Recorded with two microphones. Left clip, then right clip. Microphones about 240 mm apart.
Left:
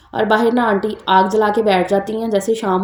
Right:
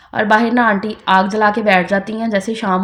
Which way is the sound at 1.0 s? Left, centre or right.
Right.